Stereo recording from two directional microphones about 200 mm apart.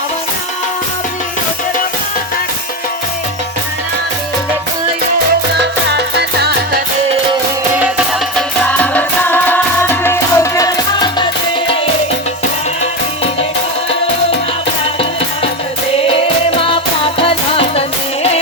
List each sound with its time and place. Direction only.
5.5 s music: 55° right (ahead or behind)
8.4 s music: 5° left (ahead or behind)
16.0 s music: 25° left (ahead or behind)